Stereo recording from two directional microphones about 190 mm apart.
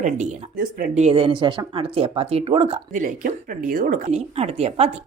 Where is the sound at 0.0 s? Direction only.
45° right (ahead or behind).